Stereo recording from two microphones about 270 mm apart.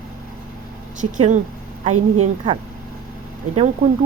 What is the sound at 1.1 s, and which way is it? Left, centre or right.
Speech, right.